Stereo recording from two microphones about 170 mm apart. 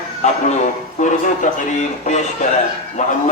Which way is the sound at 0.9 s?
45° left (ahead or behind).